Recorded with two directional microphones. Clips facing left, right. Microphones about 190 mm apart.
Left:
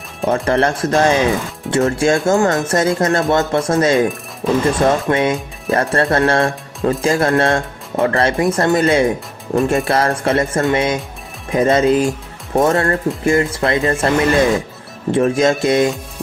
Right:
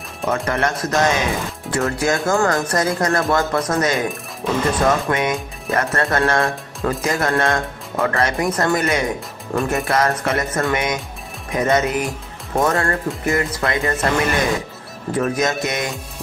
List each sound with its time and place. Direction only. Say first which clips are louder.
0.5 s speech: left 5 dB; 30° left (ahead or behind)